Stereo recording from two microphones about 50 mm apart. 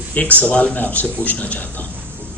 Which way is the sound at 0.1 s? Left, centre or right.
Left.